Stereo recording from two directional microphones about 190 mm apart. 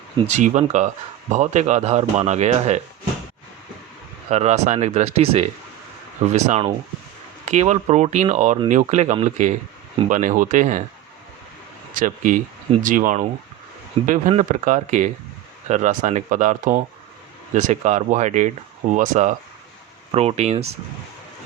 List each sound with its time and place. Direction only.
0.3 s speech: 40° right (ahead or behind)
4.3 s speech: 35° right (ahead or behind)
11.9 s speech: 45° right (ahead or behind)